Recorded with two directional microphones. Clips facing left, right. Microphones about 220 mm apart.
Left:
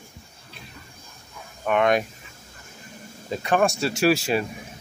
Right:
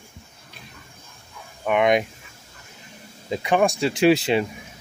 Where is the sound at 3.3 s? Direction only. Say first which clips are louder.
Right 1 dB; 15° right (ahead or behind).